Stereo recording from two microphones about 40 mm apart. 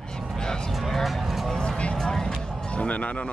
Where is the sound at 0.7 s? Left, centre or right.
Centre.